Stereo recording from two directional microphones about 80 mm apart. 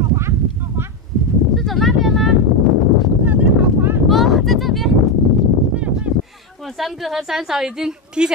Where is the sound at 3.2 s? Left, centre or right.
Centre.